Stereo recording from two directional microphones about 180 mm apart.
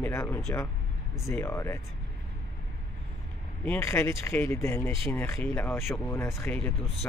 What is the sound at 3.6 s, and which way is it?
Speech, 15° left (ahead or behind).